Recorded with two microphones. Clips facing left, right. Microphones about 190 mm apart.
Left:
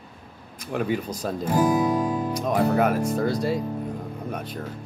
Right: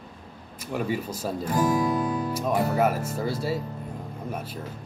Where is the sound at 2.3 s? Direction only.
5° right (ahead or behind).